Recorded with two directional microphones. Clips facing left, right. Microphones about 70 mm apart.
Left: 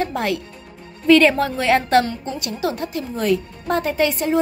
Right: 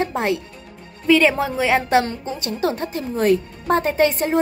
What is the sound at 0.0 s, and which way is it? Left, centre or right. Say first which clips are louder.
Speech: right 1 dB; right.